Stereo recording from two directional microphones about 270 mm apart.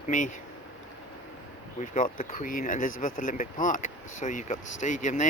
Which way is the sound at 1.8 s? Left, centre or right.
Left.